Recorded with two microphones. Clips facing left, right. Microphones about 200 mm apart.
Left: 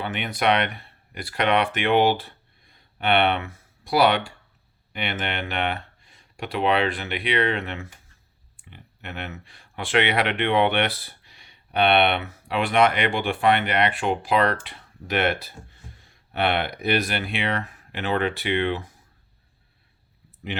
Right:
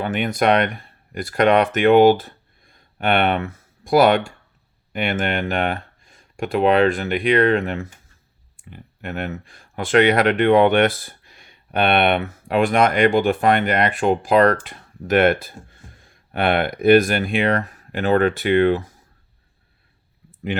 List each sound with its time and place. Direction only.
0.0 s speech: 45° right (ahead or behind)